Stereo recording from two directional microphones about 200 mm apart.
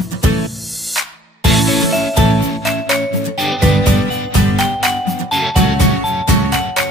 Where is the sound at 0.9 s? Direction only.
Centre (ahead or behind).